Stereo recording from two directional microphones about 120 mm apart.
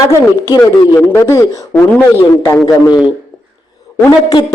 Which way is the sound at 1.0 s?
20° left (ahead or behind).